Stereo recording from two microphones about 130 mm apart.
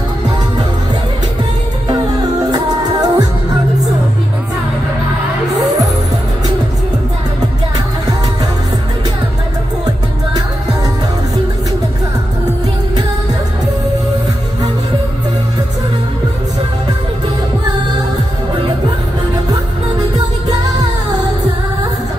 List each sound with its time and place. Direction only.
2.5 s music: 30° right (ahead or behind)